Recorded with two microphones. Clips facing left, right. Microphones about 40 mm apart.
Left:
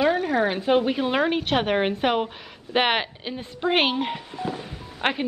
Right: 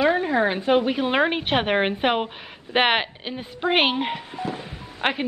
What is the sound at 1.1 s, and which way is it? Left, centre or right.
A woman's voice, right.